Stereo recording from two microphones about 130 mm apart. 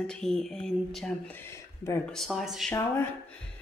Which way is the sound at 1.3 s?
20° left (ahead or behind).